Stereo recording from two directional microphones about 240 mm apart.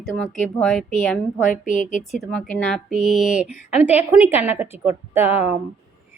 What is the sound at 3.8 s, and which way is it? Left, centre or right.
A woman's voice, centre.